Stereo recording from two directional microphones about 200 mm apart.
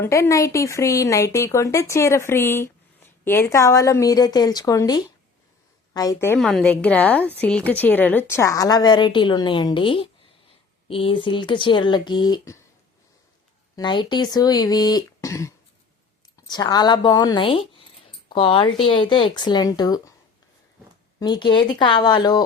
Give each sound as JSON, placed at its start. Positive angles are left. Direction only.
{"t": 0.0, "sound": "a woman's voice", "side_deg": 15}
{"t": 13.7, "sound": "a woman's voice", "side_deg": 25}
{"t": 21.2, "sound": "a woman's voice", "side_deg": 20}